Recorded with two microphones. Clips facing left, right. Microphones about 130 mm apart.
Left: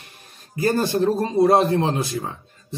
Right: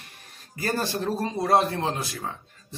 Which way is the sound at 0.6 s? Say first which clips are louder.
Left 8 dB; 20° left (ahead or behind).